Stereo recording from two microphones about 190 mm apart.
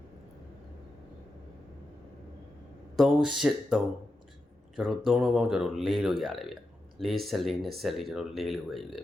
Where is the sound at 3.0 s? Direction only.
Centre (ahead or behind).